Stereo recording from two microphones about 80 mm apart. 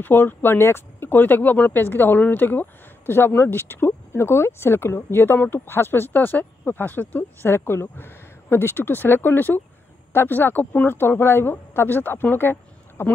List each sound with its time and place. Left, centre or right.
0.0 s speech: left